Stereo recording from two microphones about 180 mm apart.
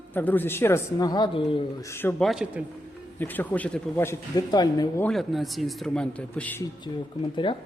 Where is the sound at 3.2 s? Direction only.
10° left (ahead or behind).